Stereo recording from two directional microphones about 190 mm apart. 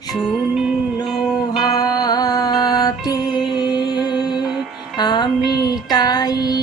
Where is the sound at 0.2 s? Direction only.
5° right (ahead or behind).